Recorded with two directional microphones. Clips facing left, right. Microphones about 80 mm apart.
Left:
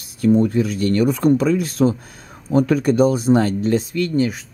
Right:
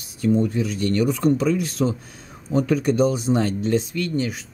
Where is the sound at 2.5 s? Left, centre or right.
Left.